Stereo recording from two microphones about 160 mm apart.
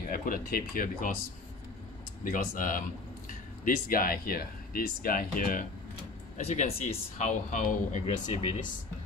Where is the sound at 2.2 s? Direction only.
55° left (ahead or behind).